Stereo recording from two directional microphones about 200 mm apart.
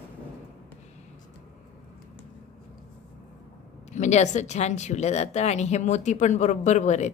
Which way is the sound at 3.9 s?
35° left (ahead or behind).